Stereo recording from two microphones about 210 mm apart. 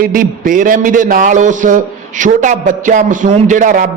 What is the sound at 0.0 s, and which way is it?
A man's voice, 40° right (ahead or behind).